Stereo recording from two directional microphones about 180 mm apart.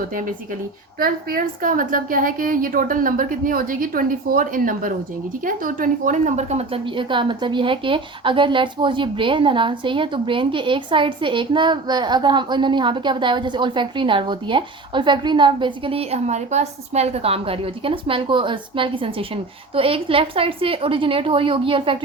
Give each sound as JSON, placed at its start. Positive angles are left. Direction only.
{"t": 0.9, "sound": "a woman's voice", "side_deg": -55}